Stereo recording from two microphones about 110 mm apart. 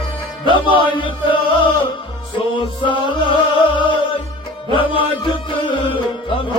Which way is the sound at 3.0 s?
45° left (ahead or behind).